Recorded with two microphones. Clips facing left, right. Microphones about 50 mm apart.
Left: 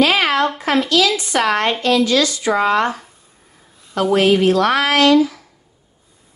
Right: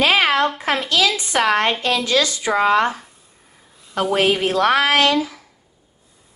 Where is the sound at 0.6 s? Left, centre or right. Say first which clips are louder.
Left 3 dB; right.